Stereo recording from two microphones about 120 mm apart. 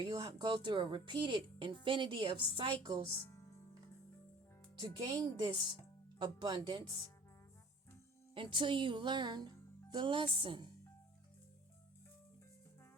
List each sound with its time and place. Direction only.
0.0 s speech: 40° right (ahead or behind)
4.8 s speech: 40° right (ahead or behind)
8.4 s speech: 45° right (ahead or behind)